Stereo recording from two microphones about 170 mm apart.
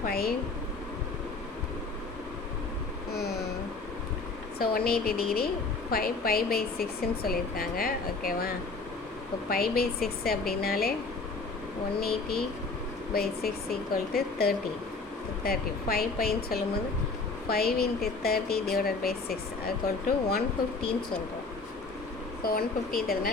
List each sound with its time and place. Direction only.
0.0 s a sound: 60° left (ahead or behind)
4.5 s speech: 65° left (ahead or behind)
11.9 s speech: 65° left (ahead or behind)
22.4 s speech: 60° left (ahead or behind)